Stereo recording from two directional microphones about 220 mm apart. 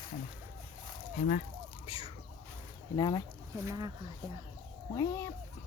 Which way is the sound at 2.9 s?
20° left (ahead or behind).